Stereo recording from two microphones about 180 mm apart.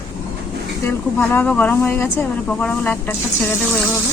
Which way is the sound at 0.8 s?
10° left (ahead or behind).